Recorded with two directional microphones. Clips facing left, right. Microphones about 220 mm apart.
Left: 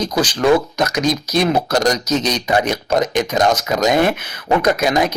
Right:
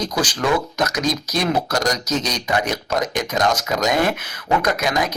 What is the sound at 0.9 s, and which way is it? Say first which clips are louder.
Speech: left 4 dB; 25° left (ahead or behind).